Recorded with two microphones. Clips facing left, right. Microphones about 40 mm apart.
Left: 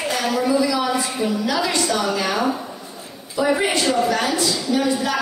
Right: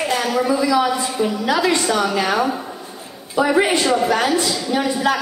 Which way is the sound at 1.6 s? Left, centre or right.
Right.